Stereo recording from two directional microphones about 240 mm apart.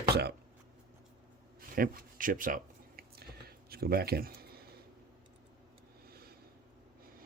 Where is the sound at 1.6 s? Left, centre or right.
Right.